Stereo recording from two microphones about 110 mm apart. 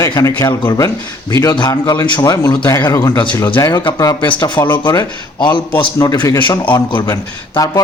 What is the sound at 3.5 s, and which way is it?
Speech, 30° left (ahead or behind).